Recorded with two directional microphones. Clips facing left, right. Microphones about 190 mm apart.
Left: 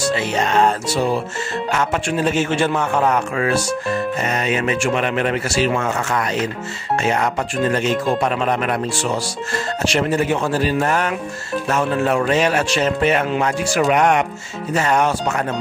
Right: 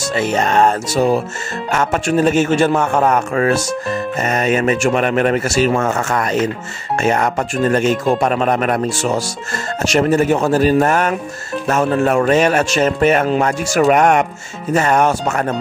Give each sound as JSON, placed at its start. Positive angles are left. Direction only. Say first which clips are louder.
{"t": 0.1, "sound": "speech", "louder": "right 7 dB", "side_deg": -45}